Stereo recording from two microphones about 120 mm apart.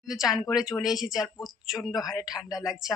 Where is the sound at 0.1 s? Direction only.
5° right (ahead or behind).